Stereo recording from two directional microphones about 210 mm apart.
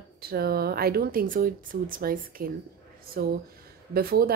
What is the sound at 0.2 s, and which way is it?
A woman's voice, 45° right (ahead or behind).